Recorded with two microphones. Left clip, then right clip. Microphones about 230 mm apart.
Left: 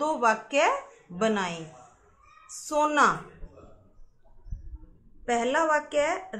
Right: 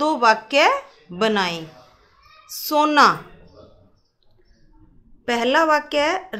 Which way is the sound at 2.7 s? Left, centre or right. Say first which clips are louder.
Right 8 dB; right.